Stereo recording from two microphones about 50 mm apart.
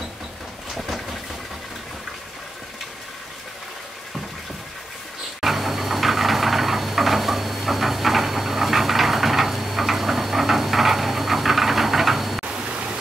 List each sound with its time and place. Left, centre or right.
0.7 s vehicle: centre
5.4 s a sound: centre
12.4 s music: right